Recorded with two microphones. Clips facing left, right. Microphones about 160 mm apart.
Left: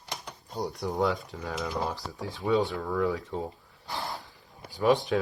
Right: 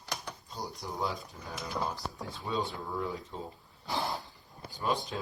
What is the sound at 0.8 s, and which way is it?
Speech, 65° left (ahead or behind).